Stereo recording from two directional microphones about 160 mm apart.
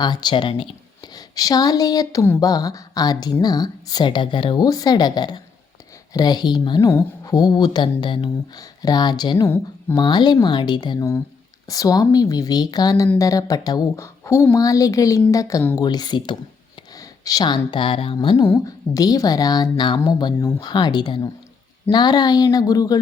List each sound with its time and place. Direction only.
0.0 s speech: 25° left (ahead or behind)
2.2 s speech: 10° left (ahead or behind); by 16.4 s 30° left (ahead or behind)
16.9 s a sound: 20° left (ahead or behind)
17.7 s music: 30° left (ahead or behind)
18.4 s speech: 20° left (ahead or behind)